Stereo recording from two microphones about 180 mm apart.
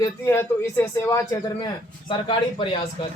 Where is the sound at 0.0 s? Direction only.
15° left (ahead or behind).